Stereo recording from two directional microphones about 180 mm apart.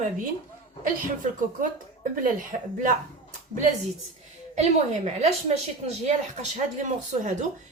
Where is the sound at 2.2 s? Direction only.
50° right (ahead or behind).